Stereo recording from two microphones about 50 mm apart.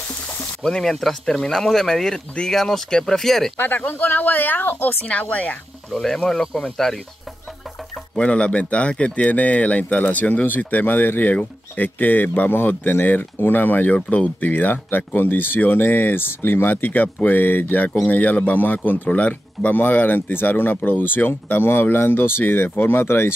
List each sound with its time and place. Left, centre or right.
0.6 s speech: centre
3.5 s speech: left
5.3 s speech: left
5.9 s speech: centre
8.2 s speech: left